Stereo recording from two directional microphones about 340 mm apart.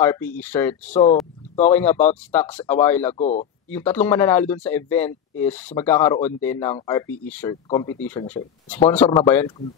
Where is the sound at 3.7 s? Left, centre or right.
Centre.